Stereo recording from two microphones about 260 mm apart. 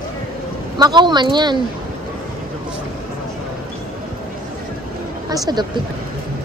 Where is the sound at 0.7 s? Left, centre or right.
Centre.